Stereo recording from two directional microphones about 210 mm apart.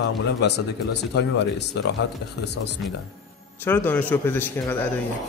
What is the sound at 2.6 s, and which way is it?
Speech, 60° left (ahead or behind).